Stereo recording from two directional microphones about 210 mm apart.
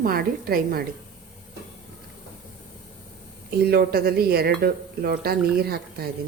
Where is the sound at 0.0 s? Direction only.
45° right (ahead or behind).